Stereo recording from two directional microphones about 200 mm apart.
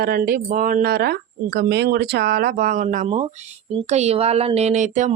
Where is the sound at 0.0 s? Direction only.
50° right (ahead or behind).